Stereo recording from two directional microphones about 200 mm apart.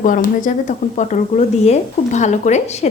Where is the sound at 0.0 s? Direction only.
40° left (ahead or behind).